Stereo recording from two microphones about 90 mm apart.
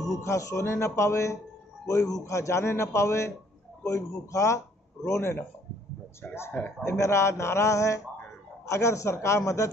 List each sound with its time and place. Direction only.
0.0 s a man's voice: 35° left (ahead or behind)